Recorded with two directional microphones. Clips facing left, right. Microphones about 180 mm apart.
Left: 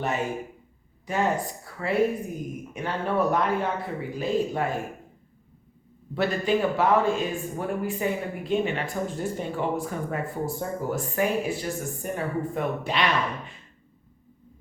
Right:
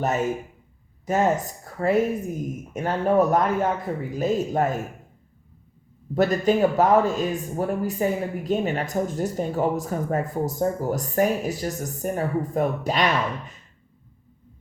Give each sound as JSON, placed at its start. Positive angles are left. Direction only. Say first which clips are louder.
{"t": 0.0, "sound": "speech", "louder": "right 4 dB", "side_deg": -40}
{"t": 6.1, "sound": "speech", "louder": "right 4 dB", "side_deg": -45}